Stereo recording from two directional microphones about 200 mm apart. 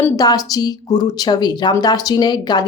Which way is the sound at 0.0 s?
20° left (ahead or behind).